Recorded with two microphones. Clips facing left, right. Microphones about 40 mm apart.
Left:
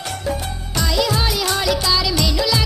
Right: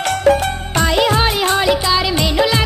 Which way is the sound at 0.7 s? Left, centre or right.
Right.